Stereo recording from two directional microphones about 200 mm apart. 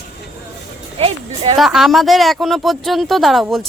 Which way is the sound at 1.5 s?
Centre (ahead or behind).